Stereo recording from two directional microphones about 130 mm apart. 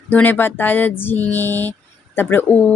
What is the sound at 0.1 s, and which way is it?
A woman's voice, 15° left (ahead or behind).